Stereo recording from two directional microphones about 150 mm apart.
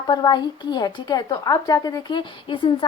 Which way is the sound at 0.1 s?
30° left (ahead or behind).